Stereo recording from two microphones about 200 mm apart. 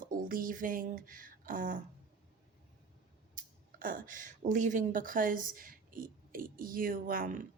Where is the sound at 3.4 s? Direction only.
45° right (ahead or behind).